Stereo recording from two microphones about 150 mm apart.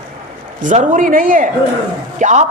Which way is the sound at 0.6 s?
60° right (ahead or behind).